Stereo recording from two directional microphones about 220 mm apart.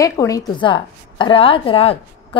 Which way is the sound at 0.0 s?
15° left (ahead or behind).